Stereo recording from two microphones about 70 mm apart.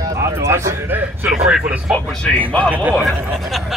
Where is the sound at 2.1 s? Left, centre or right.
Centre.